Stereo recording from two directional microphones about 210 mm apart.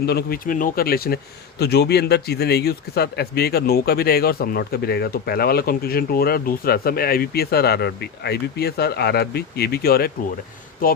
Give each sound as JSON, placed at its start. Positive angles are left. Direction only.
{"t": 0.0, "sound": "speech", "side_deg": 50}